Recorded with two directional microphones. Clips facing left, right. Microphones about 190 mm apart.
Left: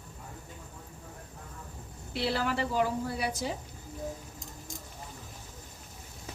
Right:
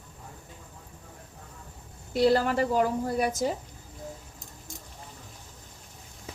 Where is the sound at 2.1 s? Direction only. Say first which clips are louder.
Right 8 dB; 45° right (ahead or behind).